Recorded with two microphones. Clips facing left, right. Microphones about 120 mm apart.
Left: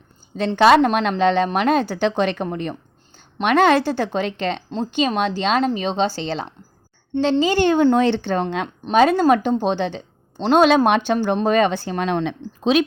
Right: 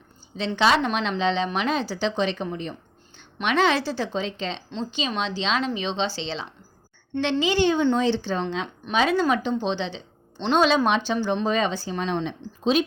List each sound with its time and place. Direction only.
0.3 s speech: 50° left (ahead or behind); by 12.8 s 70° left (ahead or behind)